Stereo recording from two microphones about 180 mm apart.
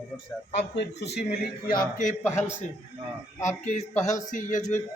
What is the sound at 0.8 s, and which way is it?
A man's voice, 70° left (ahead or behind).